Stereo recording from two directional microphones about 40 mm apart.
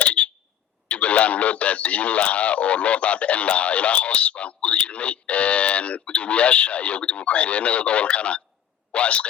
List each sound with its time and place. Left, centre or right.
0.0 s smoke detector: left
0.9 s speech: left